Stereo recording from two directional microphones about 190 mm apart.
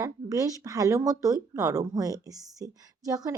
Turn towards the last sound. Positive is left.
turn(degrees=-20)  # may be behind; listen again after turning